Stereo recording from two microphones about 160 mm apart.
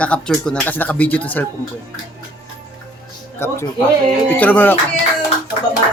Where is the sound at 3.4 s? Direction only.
15° left (ahead or behind).